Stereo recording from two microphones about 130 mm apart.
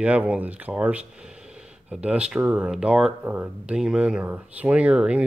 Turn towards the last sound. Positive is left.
turn(degrees=-10)  # may be behind; listen again after turning